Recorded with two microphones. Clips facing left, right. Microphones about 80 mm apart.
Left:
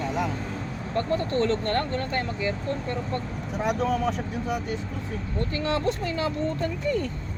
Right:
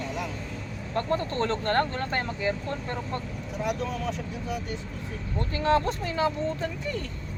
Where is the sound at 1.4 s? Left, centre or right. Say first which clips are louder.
Even; right.